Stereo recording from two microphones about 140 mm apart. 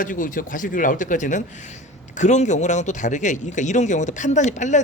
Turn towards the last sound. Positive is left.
turn(degrees=60)  # may be behind; listen again after turning